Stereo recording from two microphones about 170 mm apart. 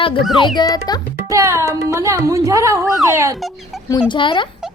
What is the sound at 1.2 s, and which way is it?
Speech, 20° right (ahead or behind).